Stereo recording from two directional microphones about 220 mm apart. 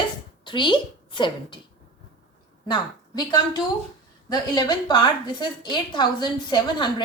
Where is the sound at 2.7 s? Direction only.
20° left (ahead or behind).